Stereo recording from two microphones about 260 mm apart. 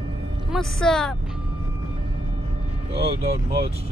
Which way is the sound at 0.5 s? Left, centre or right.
Centre.